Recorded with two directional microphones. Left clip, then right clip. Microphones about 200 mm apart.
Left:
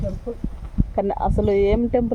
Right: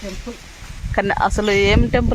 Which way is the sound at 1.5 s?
Centre (ahead or behind).